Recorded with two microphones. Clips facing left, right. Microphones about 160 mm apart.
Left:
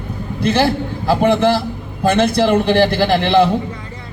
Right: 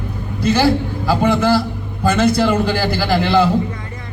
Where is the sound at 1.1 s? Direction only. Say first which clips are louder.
Left 1 dB; 25° left (ahead or behind).